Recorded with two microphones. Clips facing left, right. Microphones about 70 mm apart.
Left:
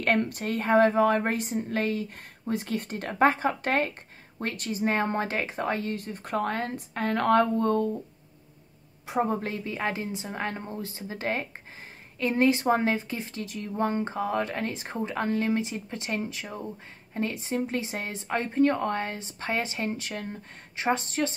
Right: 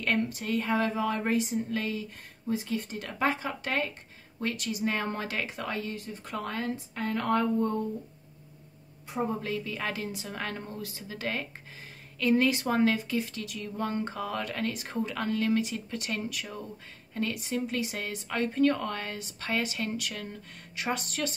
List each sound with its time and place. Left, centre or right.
0.0 s a woman's voice: left
9.5 s speech: left